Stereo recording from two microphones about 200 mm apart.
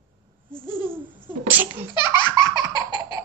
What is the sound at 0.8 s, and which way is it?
Laughter, 10° right (ahead or behind).